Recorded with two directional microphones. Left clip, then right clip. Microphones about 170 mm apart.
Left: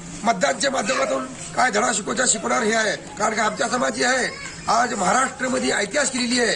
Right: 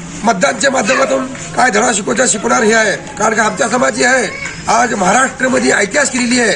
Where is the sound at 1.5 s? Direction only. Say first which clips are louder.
Right 8 dB; 25° left (ahead or behind).